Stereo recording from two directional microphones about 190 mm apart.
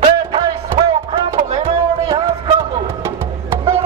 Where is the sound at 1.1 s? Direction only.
30° right (ahead or behind).